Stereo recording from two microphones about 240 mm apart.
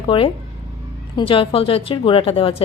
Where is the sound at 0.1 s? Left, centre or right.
Left.